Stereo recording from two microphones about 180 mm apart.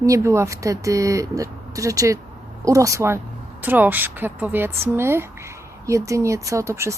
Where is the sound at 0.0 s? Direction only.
15° right (ahead or behind).